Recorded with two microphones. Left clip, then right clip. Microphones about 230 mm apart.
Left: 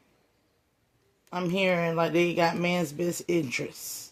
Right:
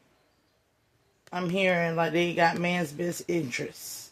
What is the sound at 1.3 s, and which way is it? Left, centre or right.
Speech, centre.